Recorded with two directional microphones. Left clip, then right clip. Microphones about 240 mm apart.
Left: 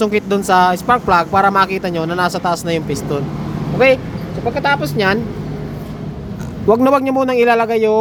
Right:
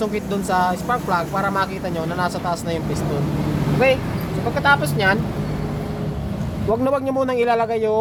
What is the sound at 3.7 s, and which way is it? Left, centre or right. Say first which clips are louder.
A man's voice: left 6 dB; left.